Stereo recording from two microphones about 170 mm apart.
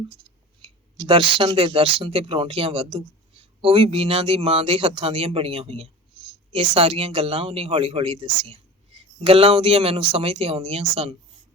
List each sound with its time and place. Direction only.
0.9 s speech: 30° right (ahead or behind)